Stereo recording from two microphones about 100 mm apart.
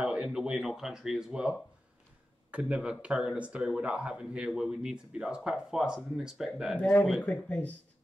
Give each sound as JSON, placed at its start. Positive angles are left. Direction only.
{"t": 0.0, "sound": "speech", "side_deg": -10}
{"t": 6.8, "sound": "speech", "side_deg": 20}